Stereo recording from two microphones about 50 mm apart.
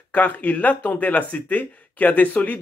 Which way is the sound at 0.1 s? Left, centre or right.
Left.